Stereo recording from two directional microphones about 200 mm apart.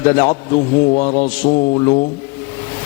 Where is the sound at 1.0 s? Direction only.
35° left (ahead or behind).